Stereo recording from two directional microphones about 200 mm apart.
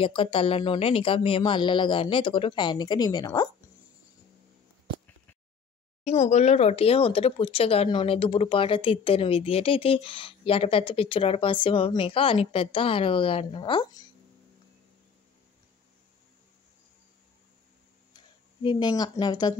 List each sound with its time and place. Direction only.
0.0 s speech: 25° left (ahead or behind)
6.0 s speech: 35° left (ahead or behind)
18.1 s speech: 20° left (ahead or behind)